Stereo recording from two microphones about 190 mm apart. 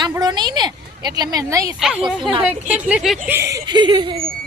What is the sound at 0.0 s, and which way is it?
A woman's voice, 20° right (ahead or behind).